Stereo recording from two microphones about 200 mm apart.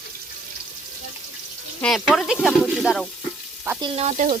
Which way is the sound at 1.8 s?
5° left (ahead or behind).